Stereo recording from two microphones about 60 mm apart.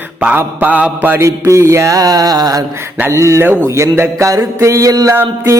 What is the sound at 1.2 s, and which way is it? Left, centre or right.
Music, right.